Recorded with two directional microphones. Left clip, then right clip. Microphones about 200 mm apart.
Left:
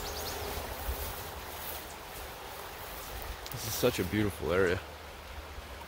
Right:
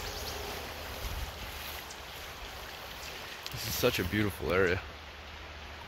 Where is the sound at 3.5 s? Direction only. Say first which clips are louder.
Even; 15° left (ahead or behind).